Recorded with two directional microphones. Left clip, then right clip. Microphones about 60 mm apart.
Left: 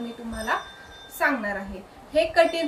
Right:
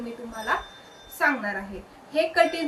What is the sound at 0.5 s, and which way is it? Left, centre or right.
A woman's voice, right.